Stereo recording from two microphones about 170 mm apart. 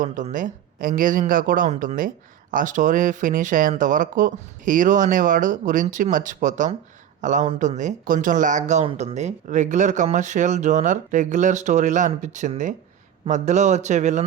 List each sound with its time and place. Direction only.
0.0 s speech: 50° right (ahead or behind)